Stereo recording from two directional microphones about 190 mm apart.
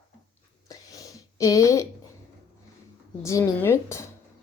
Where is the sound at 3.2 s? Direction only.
15° left (ahead or behind).